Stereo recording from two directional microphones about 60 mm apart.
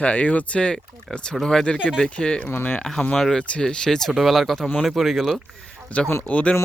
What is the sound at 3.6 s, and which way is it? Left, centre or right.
Speech, centre.